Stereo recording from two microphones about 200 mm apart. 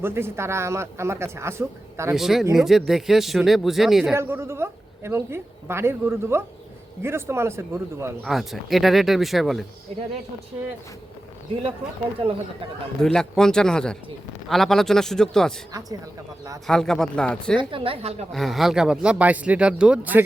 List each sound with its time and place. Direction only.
0.0 s a woman's voice: 10° right (ahead or behind)
2.1 s speech: centre (ahead or behind)
4.1 s a woman's voice: 10° right (ahead or behind)
8.2 s speech: centre (ahead or behind)
13.0 s speech: 5° left (ahead or behind)
16.6 s speech: 5° left (ahead or behind)
17.6 s a woman's voice: 25° right (ahead or behind)
18.3 s speech: centre (ahead or behind)